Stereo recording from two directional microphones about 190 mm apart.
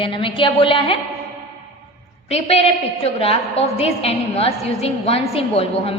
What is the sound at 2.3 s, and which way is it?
A woman's voice, 35° left (ahead or behind).